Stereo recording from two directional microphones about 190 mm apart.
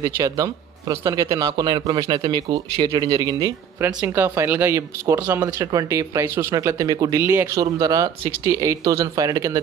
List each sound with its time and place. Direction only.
0.0 s a man's voice: 20° right (ahead or behind)